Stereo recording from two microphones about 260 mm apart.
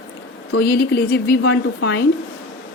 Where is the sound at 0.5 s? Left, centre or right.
Left.